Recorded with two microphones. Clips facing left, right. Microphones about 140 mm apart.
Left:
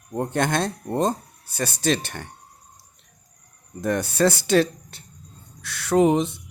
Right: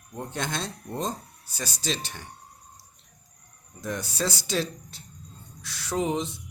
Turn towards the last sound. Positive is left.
turn(degrees=60)  # may be behind; listen again after turning